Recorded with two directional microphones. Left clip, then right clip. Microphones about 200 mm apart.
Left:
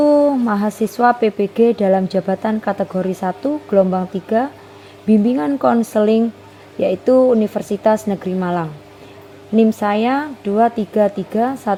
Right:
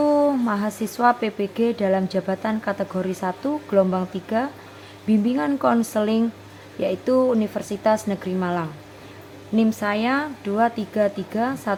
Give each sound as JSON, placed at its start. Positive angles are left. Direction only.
{"t": 0.0, "sound": "speech", "side_deg": 25}